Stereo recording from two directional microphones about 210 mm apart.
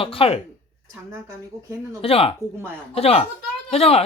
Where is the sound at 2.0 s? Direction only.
25° left (ahead or behind).